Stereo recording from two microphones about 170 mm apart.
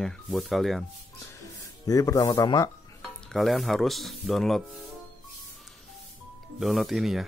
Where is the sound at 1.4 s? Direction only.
20° left (ahead or behind).